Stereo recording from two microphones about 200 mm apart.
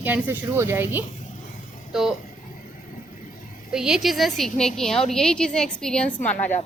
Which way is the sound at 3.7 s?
5° right (ahead or behind).